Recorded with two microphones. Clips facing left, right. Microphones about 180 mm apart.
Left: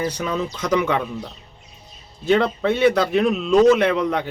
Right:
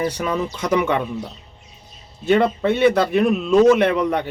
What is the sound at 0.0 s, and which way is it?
Speech, 55° right (ahead or behind).